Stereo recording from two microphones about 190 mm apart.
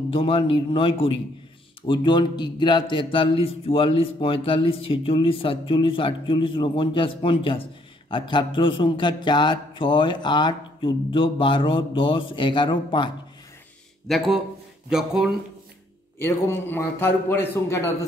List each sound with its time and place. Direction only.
0.1 s speech: 30° left (ahead or behind)
14.0 s speech: centre (ahead or behind)
16.2 s a man's voice: 15° left (ahead or behind)